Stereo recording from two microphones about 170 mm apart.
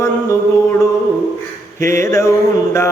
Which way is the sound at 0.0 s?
15° left (ahead or behind).